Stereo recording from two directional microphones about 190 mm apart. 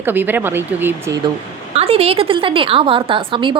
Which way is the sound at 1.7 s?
30° right (ahead or behind).